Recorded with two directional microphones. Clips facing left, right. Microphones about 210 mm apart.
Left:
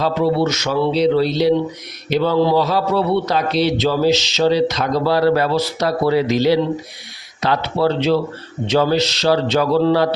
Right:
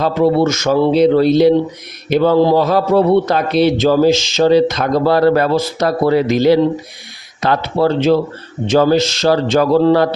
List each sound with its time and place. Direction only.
0.0 s a man's voice: 50° right (ahead or behind)